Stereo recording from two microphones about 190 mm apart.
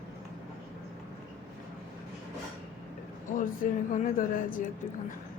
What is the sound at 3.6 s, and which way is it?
Speech, 45° left (ahead or behind).